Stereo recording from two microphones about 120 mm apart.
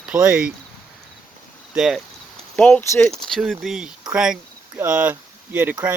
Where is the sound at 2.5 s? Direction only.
10° left (ahead or behind).